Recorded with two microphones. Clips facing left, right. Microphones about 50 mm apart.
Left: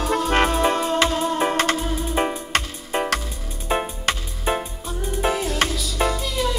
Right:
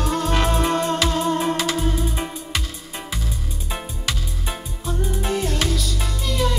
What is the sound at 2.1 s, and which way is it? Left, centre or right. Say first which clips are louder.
Music: left 6 dB; left.